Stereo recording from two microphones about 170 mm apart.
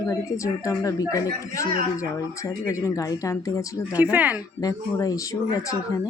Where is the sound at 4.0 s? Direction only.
10° right (ahead or behind).